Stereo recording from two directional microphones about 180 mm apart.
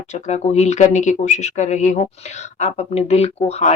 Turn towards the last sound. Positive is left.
turn(degrees=35)  # may be behind; listen again after turning